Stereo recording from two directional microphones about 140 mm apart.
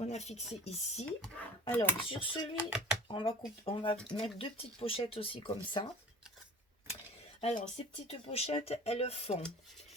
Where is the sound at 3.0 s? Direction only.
40° left (ahead or behind).